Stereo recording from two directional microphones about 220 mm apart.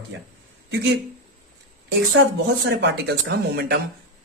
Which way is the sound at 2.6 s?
50° right (ahead or behind).